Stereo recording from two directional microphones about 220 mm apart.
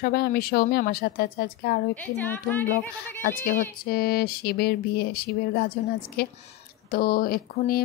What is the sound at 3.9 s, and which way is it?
Speech, 45° left (ahead or behind).